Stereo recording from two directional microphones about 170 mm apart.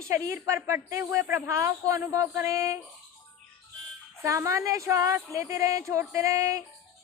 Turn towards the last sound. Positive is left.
turn(degrees=-20)  # may be behind; listen again after turning